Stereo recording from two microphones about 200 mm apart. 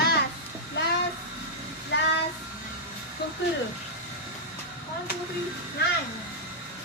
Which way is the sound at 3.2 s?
55° left (ahead or behind).